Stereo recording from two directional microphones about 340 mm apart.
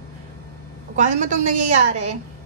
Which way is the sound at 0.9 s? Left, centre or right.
Right.